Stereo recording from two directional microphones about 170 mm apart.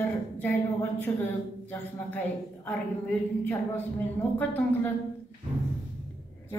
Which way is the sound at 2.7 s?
10° left (ahead or behind).